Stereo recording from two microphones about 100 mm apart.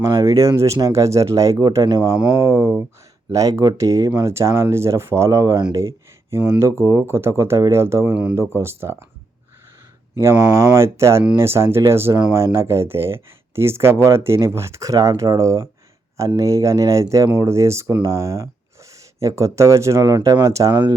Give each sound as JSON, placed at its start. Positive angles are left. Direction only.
{"t": 0.0, "sound": "speech", "side_deg": -30}
{"t": 1.9, "sound": "speech", "side_deg": -45}
{"t": 2.4, "sound": "speech", "side_deg": -30}
{"t": 10.8, "sound": "speech", "side_deg": -30}